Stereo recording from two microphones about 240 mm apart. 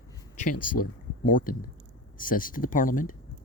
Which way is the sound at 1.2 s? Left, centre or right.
Left.